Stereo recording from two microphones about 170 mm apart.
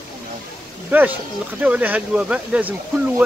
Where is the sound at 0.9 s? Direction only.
10° right (ahead or behind).